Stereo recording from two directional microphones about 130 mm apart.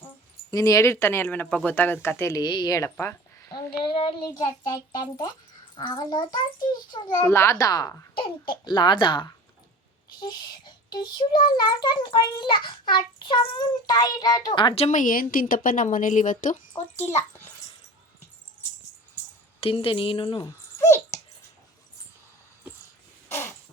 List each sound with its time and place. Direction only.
0.5 s speech: 25° left (ahead or behind)
3.5 s a child's voice: 40° left (ahead or behind)
7.3 s speech: 20° left (ahead or behind)
8.1 s a child's voice: 40° left (ahead or behind)
14.8 s speech: 70° left (ahead or behind)
17.0 s speech: 20° left (ahead or behind)
19.5 s speech: 45° left (ahead or behind)
20.7 s a sound: 20° left (ahead or behind)
23.3 s crow: 20° left (ahead or behind)